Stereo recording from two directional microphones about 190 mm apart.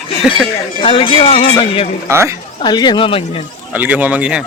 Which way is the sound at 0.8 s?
25° left (ahead or behind).